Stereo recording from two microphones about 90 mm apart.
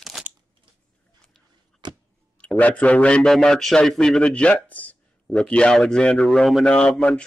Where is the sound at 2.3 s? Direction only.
15° left (ahead or behind).